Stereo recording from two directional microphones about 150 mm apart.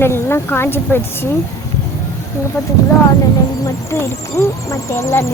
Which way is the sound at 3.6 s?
20° left (ahead or behind).